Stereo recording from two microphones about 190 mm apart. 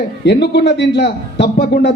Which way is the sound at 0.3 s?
60° left (ahead or behind).